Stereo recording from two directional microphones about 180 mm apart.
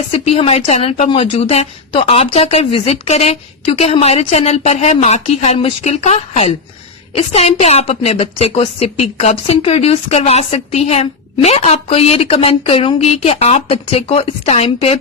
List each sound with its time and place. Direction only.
0.1 s a woman's voice: 35° left (ahead or behind)